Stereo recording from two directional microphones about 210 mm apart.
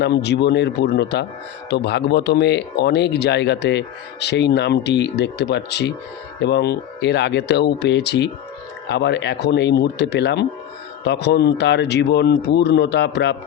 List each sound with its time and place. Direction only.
0.0 s speech: 55° left (ahead or behind)